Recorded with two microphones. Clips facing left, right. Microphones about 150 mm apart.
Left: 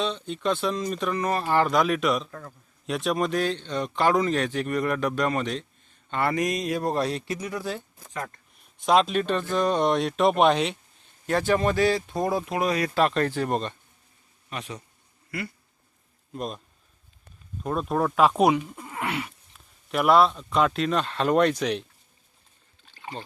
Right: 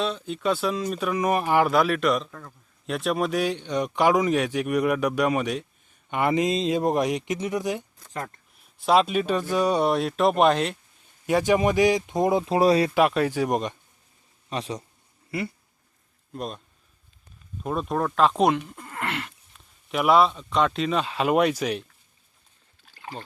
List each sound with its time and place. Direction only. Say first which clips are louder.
0.0 s speech: right 1 dB; 5° right (ahead or behind)
8.5 s speech: right 1 dB; centre (ahead or behind)
11.3 s speech: right 2 dB; 15° right (ahead or behind)
12.5 s speech: right 8 dB; 30° right (ahead or behind)
12.9 s speech: right 2 dB; 10° right (ahead or behind)
14.5 s speech: right 5 dB; 30° right (ahead or behind)
16.3 s speech: even; centre (ahead or behind)
19.9 s speech: even; centre (ahead or behind)
22.9 s rowboat: even; 5° right (ahead or behind)